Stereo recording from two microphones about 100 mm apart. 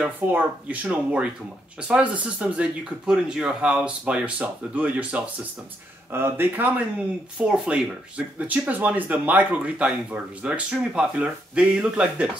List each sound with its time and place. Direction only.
0.0 s speech: 15° right (ahead or behind)
7.3 s speech: 10° right (ahead or behind)